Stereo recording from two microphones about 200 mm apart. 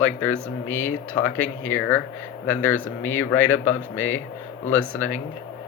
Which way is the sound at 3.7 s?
75° left (ahead or behind).